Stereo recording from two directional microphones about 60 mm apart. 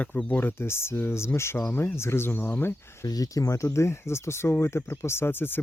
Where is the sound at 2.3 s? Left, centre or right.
Left.